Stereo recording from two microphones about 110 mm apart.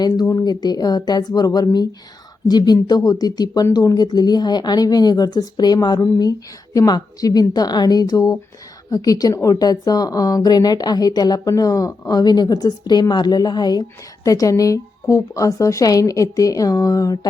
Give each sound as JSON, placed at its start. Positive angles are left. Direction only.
{"t": 0.0, "sound": "speech", "side_deg": 35}